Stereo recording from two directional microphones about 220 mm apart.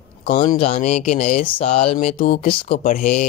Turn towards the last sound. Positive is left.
turn(degrees=35)  # may be behind; listen again after turning